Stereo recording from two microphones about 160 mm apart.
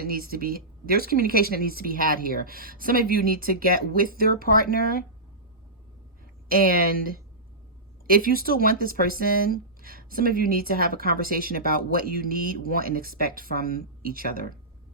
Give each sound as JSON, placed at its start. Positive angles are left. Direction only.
{"t": 0.0, "sound": "speech", "side_deg": -70}
{"t": 6.5, "sound": "speech", "side_deg": -65}
{"t": 13.6, "sound": "speech", "side_deg": 65}
{"t": 14.0, "sound": "speech", "side_deg": -70}